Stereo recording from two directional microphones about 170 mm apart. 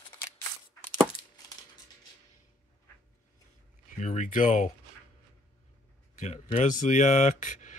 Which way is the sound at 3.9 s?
50° left (ahead or behind).